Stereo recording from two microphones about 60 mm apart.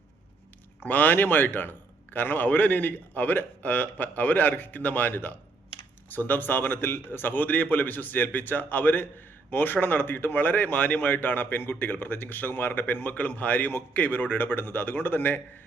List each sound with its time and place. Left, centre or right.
0.9 s a man's voice: left